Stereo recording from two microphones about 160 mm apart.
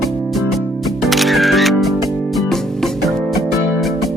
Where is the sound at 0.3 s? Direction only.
Centre (ahead or behind).